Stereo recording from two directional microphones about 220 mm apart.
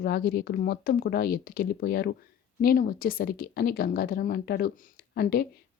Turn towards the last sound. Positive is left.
turn(degrees=45)  # may be behind; listen again after turning